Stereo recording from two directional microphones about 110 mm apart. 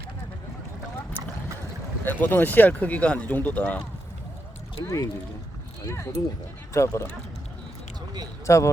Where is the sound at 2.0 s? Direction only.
15° left (ahead or behind).